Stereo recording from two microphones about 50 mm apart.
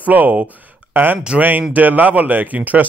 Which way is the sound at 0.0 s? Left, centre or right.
Right.